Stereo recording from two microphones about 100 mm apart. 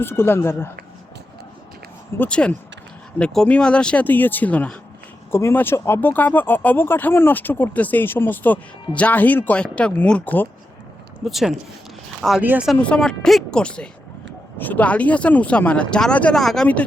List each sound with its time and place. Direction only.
0.0 s speech: 25° left (ahead or behind)
2.1 s speech: 15° left (ahead or behind)
5.3 s speech: 25° left (ahead or behind)
11.3 s speech: centre (ahead or behind)
12.4 s speech: 15° right (ahead or behind)
12.7 s speech: 10° left (ahead or behind)